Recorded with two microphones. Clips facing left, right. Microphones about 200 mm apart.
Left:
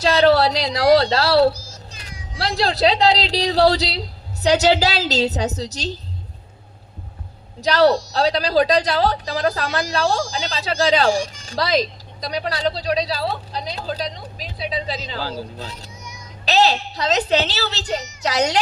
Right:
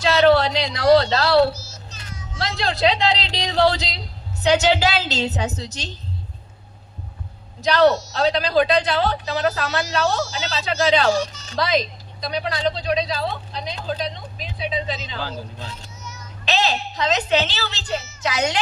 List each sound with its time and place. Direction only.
0.0 s a sound: 35° left (ahead or behind)
1.5 s music: 15° left (ahead or behind)
2.4 s a woman's voice: 35° left (ahead or behind)
7.6 s a woman's voice: 35° left (ahead or behind)
10.2 s speech: 15° left (ahead or behind)
10.6 s a woman's voice: 35° left (ahead or behind)
11.1 s speech: 10° left (ahead or behind)
11.4 s a woman's voice: 35° left (ahead or behind)